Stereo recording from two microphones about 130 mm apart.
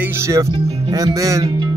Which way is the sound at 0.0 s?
20° right (ahead or behind).